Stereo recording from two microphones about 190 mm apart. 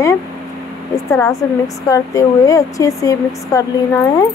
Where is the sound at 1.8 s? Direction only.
15° left (ahead or behind).